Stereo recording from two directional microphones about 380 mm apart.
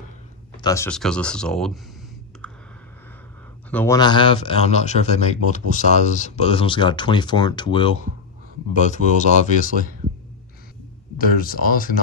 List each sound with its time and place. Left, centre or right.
0.6 s speech: centre
3.7 s speech: centre
11.1 s speech: left